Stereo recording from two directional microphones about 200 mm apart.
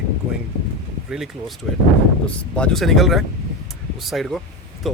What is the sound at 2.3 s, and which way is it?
Speech, 5° left (ahead or behind).